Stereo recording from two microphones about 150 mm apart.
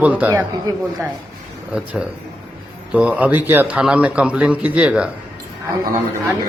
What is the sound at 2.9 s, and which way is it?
Speech, 10° right (ahead or behind).